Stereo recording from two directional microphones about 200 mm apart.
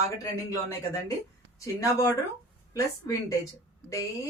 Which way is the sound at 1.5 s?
15° left (ahead or behind).